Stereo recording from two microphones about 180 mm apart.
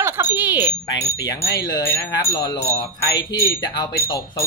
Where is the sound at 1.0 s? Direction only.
20° left (ahead or behind).